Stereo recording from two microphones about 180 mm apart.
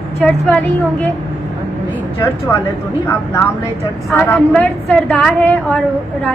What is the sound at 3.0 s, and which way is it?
A woman's voice, 10° left (ahead or behind).